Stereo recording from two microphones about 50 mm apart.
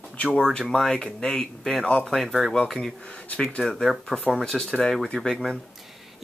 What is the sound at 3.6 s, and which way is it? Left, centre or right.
Speech, centre.